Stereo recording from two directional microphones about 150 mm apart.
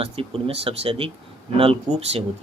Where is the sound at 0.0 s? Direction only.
40° right (ahead or behind).